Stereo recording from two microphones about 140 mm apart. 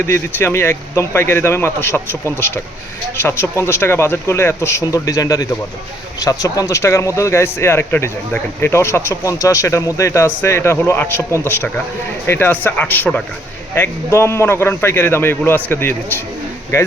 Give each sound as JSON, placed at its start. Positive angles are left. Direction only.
{"t": 0.0, "sound": "speech", "side_deg": 15}